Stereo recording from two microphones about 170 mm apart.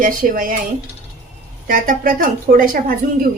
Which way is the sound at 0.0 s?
55° right (ahead or behind).